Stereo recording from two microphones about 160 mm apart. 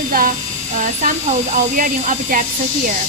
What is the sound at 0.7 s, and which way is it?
A woman's voice, 50° right (ahead or behind).